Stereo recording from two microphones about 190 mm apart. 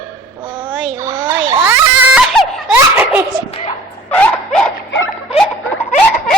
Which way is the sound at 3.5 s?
30° left (ahead or behind).